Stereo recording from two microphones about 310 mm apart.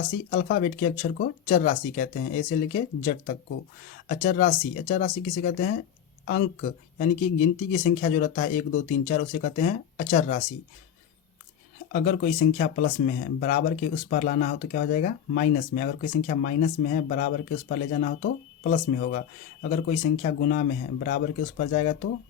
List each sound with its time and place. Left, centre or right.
0.3 s speech: left
11.9 s speech: left